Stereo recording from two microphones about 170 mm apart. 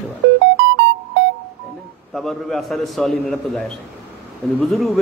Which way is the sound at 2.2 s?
Centre (ahead or behind).